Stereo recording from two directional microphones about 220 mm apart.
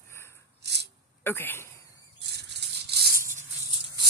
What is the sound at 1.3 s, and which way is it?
Speech, 10° left (ahead or behind).